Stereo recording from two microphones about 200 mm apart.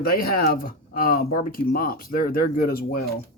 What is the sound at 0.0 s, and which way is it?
Speech, 50° left (ahead or behind).